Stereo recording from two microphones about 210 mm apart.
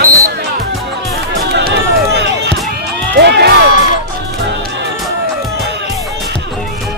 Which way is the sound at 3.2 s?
55° right (ahead or behind).